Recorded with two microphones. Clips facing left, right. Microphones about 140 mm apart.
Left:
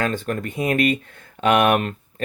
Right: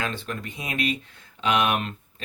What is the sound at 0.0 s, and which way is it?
Speech, 45° left (ahead or behind).